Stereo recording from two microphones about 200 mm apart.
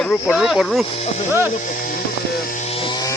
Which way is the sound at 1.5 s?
40° left (ahead or behind).